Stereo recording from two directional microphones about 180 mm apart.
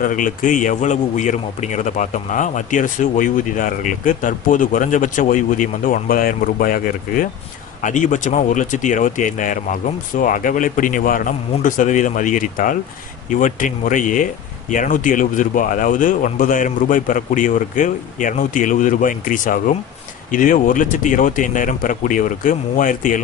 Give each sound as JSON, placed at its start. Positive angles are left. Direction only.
{"t": 0.0, "sound": "a man's voice", "side_deg": 50}